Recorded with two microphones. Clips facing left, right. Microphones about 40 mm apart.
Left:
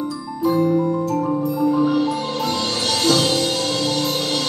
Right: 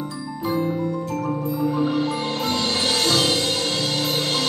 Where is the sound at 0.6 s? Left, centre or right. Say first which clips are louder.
Left 6 dB; centre.